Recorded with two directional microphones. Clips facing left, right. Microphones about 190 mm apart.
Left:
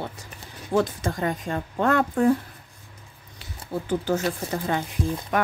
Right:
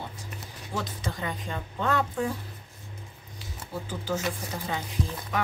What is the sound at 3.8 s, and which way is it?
Speech, 60° left (ahead or behind).